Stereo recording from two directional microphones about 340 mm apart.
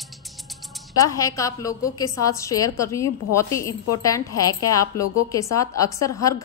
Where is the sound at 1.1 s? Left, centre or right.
Centre.